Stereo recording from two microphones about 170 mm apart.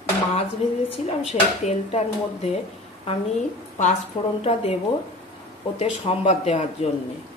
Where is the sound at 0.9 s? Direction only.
35° left (ahead or behind).